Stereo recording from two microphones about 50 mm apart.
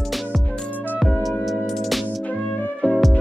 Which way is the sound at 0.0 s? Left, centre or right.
Centre.